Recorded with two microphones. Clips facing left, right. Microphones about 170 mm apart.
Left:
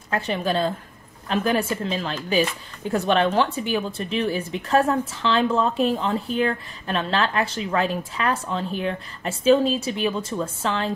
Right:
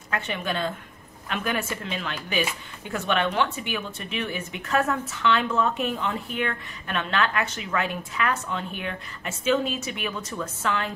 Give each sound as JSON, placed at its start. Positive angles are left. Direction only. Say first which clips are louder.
{"t": 0.1, "sound": "speech", "louder": "left 5 dB", "side_deg": 35}